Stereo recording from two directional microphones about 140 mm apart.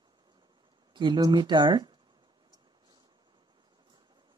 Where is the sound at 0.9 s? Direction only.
30° right (ahead or behind).